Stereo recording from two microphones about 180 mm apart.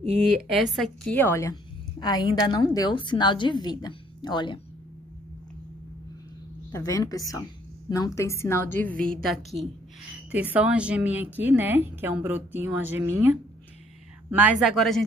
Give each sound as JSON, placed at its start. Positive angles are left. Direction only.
{"t": 0.6, "sound": "a woman's voice", "side_deg": 0}
{"t": 1.1, "sound": "a woman's voice", "side_deg": 10}
{"t": 6.7, "sound": "a woman's voice", "side_deg": 20}
{"t": 14.4, "sound": "a woman's voice", "side_deg": 0}